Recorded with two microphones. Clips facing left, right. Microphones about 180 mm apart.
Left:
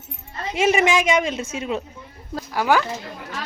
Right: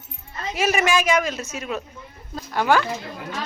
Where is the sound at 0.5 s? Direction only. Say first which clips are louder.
Left 3 dB; 25° left (ahead or behind).